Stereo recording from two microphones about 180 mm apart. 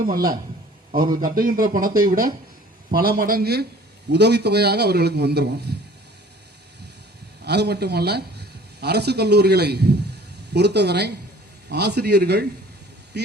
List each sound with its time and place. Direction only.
0.1 s a man's voice: 55° right (ahead or behind)
7.4 s a man's voice: 65° right (ahead or behind)
13.1 s vehicle: 65° right (ahead or behind)